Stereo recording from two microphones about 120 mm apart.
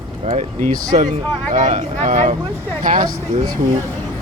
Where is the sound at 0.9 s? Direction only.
85° right.